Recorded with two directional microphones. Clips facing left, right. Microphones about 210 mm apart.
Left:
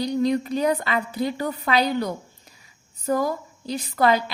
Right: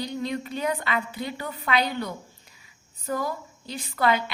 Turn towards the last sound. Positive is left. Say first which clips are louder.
# left 4 dB
turn(degrees=40)  # may be behind; listen again after turning